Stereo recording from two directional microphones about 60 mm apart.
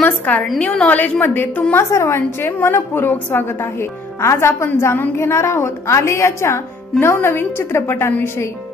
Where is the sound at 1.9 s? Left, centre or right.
Left.